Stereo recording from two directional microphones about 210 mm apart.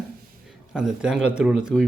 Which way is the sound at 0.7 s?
5° right (ahead or behind).